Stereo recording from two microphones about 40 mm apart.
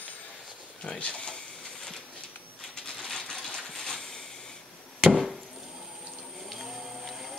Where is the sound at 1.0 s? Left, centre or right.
Left.